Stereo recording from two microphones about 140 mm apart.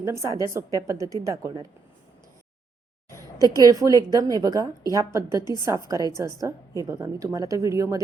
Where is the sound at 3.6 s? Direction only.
25° right (ahead or behind).